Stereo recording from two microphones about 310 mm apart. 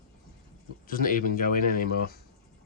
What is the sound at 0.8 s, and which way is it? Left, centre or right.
Speech, left.